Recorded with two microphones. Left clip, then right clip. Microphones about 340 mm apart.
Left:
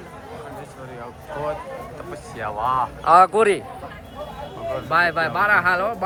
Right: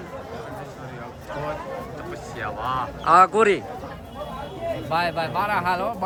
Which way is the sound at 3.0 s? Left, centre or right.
Centre.